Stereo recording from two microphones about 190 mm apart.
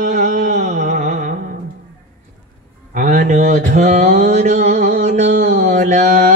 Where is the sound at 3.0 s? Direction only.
45° right (ahead or behind).